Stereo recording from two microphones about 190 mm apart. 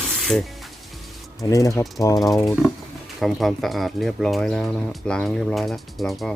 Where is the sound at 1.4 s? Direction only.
15° left (ahead or behind).